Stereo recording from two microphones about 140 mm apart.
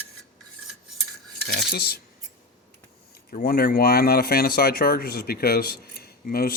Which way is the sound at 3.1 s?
90° left.